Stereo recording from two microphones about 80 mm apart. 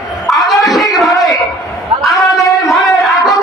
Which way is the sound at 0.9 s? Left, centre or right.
Centre.